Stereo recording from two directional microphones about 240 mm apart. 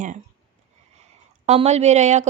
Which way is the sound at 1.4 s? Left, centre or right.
Right.